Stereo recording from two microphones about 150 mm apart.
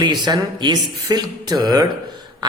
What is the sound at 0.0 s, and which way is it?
A man's voice, 30° right (ahead or behind).